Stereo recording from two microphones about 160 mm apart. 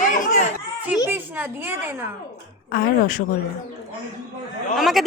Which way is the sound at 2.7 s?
60° left (ahead or behind).